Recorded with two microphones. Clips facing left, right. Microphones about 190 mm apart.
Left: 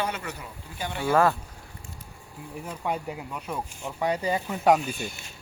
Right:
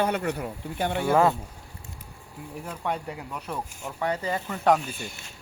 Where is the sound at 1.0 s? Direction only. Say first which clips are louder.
Even; 15° right (ahead or behind).